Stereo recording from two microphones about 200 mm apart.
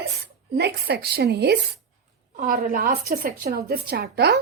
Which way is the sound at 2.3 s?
45° right (ahead or behind).